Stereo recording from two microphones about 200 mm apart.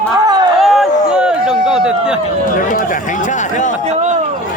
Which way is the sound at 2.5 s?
40° left (ahead or behind).